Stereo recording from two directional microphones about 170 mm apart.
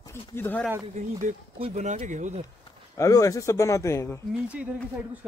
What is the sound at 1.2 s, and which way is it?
Speech, 45° right (ahead or behind).